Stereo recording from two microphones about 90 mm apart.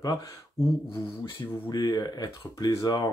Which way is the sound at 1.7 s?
45° left (ahead or behind).